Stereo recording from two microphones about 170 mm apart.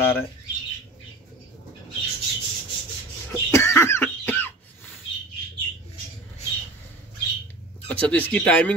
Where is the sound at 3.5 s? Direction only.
15° left (ahead or behind).